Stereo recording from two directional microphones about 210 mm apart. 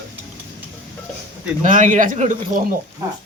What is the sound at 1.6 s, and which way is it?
Speech, 35° right (ahead or behind).